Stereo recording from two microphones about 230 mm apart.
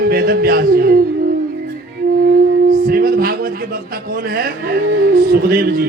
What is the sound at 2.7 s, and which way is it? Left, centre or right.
Music, right.